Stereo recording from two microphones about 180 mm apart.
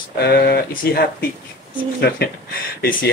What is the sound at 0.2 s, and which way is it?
Speech, 65° left (ahead or behind).